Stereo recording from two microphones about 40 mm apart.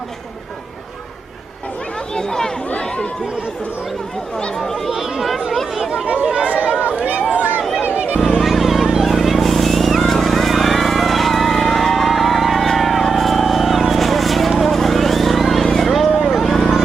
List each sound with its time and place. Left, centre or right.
2.1 s speech: centre
4.4 s speech: centre
4.9 s speech: centre
6.3 s chatter: right
6.9 s a sound: right
8.4 s a sound: centre
9.0 s vehicle: centre
14.6 s a sound: centre
16.3 s run: centre